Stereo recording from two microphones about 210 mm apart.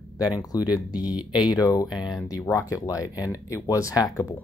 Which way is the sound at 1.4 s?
20° left (ahead or behind).